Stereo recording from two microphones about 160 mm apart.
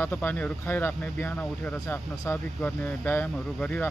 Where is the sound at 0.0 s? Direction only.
10° left (ahead or behind).